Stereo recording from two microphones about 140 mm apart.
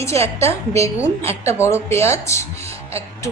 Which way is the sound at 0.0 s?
20° left (ahead or behind).